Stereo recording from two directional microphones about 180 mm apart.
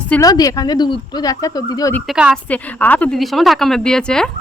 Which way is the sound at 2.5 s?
10° left (ahead or behind).